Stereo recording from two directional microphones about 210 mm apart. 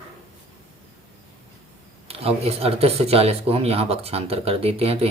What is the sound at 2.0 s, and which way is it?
Speech, 30° right (ahead or behind).